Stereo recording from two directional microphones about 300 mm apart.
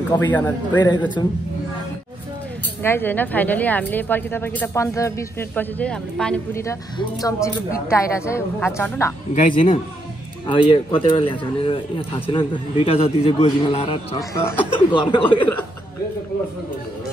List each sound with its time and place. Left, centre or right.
0.1 s speech: centre
2.8 s speech: centre
9.3 s speech: left